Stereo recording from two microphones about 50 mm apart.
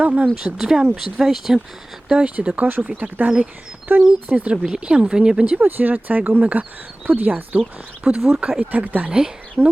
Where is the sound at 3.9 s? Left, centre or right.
Right.